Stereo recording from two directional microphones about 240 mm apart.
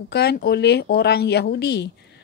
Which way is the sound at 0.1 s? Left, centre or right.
Left.